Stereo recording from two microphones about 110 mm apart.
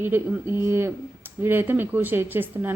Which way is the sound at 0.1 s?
15° right (ahead or behind).